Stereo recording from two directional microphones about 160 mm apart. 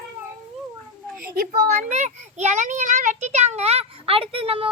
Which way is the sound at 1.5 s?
55° right (ahead or behind).